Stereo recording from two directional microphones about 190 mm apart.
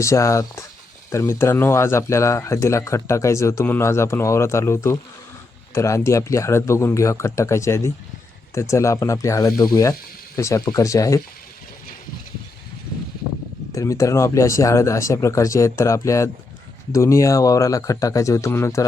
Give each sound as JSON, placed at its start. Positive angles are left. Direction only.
{"t": 0.0, "sound": "speech", "side_deg": 15}
{"t": 13.7, "sound": "speech", "side_deg": 15}